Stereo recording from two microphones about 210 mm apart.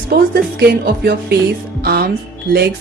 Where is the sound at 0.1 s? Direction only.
50° right (ahead or behind).